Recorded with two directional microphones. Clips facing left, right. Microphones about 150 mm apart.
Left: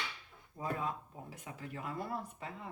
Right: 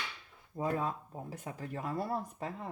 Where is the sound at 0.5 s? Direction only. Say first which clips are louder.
Right 4 dB; 40° right (ahead or behind).